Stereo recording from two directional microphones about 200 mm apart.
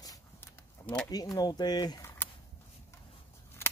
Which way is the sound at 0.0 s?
15° left (ahead or behind).